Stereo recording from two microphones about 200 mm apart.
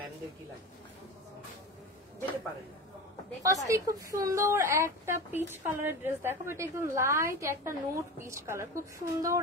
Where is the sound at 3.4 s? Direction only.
15° right (ahead or behind).